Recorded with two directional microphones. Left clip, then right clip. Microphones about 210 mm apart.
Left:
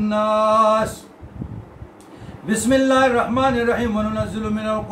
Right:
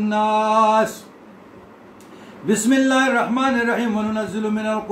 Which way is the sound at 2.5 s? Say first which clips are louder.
Left 1 dB; 10° left (ahead or behind).